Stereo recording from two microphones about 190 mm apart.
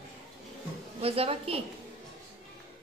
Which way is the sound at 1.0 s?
30° right (ahead or behind).